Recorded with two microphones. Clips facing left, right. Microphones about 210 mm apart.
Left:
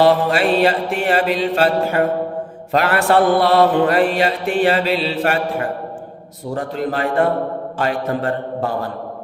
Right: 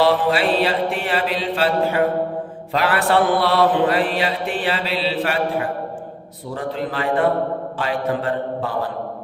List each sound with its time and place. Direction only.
0.0 s mantra: 50° left (ahead or behind)